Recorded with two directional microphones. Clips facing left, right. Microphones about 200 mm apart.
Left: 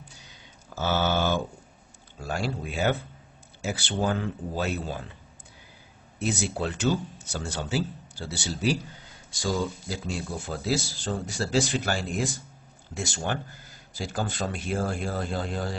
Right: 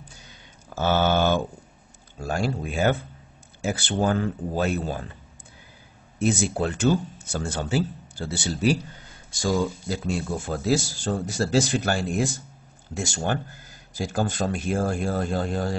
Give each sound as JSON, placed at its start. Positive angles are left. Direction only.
{"t": 0.7, "sound": "speech", "side_deg": -55}
{"t": 6.1, "sound": "speech", "side_deg": -50}